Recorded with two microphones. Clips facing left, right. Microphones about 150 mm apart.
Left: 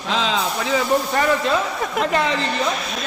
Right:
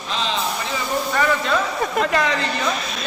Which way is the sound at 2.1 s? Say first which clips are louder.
Left 2 dB; 30° left (ahead or behind).